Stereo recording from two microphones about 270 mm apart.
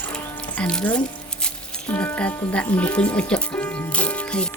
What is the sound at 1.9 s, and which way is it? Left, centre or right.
Speech, centre.